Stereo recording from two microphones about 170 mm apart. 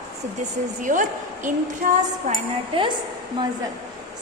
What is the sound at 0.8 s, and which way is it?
A woman's voice, 50° right (ahead or behind).